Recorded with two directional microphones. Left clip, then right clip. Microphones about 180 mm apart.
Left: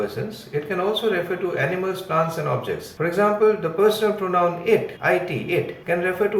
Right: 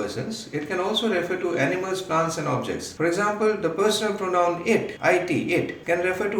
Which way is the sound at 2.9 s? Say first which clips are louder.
Left 4 dB; 30° right (ahead or behind).